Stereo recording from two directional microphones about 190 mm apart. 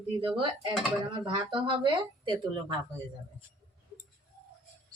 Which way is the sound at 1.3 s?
25° right (ahead or behind).